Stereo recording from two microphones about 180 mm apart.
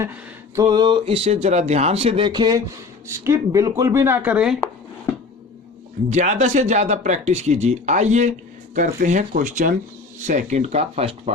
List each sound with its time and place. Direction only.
0.0 s speech: 15° right (ahead or behind)
6.1 s speech: 40° right (ahead or behind)